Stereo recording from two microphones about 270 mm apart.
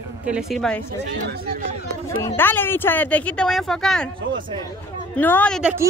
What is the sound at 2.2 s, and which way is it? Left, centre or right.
Speech, centre.